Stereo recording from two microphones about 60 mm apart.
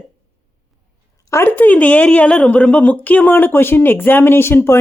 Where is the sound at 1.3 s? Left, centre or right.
Left.